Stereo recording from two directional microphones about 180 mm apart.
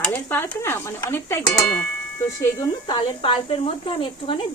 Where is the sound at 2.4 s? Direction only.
20° left (ahead or behind).